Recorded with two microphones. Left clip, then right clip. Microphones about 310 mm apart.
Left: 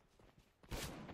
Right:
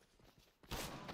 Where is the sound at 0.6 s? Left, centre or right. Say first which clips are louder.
Right 2 dB; right.